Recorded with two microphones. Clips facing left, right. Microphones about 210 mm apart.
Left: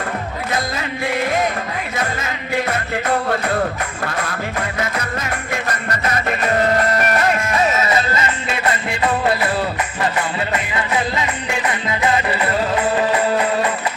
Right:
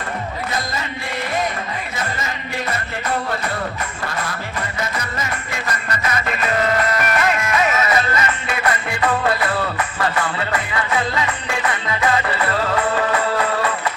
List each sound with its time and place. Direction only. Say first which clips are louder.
2.6 s music: left 4 dB; 60° left (ahead or behind)
6.1 s music: left 3 dB; 45° left (ahead or behind); by 13.7 s 20° left (ahead or behind)